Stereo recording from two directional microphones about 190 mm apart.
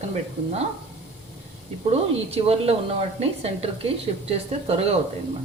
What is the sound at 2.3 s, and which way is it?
A woman's voice, 30° right (ahead or behind).